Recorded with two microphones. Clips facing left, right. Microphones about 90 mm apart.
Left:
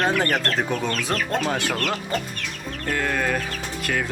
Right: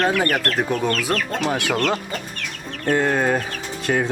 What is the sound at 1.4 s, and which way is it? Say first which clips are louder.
Speech: right 3 dB; 15° right (ahead or behind).